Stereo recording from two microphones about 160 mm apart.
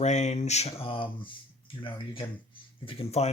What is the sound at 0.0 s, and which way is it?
Speech, 45° left (ahead or behind).